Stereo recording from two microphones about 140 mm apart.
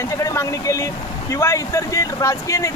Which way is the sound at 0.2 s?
25° left (ahead or behind).